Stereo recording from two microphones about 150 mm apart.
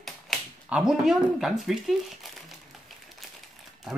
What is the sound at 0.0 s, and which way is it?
Speech, 5° right (ahead or behind).